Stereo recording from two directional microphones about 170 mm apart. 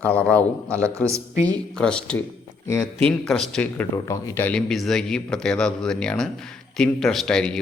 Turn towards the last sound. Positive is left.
turn(degrees=5)  # may be behind; listen again after turning